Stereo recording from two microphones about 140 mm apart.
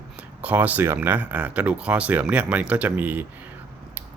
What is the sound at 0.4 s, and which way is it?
Speech, 10° right (ahead or behind).